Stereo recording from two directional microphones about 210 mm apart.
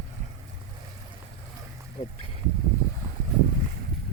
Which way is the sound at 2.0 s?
25° left (ahead or behind).